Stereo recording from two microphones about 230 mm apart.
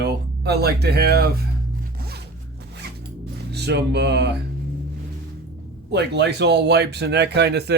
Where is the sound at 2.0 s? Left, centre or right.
Right.